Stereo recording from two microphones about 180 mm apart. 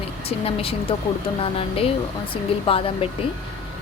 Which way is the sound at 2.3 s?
30° left (ahead or behind).